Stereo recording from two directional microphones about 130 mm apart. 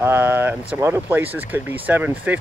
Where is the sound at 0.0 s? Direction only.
15° right (ahead or behind).